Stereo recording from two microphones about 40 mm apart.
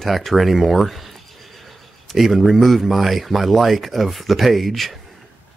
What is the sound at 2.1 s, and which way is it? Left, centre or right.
Speech, centre.